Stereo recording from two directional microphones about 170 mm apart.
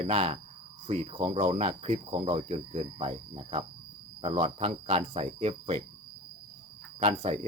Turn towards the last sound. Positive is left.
turn(degrees=-40)  # may be behind; listen again after turning